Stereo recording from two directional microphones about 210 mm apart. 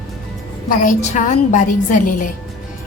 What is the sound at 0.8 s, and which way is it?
A woman's voice, 35° left (ahead or behind).